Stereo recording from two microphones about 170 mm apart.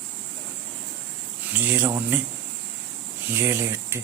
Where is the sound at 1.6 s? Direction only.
10° right (ahead or behind).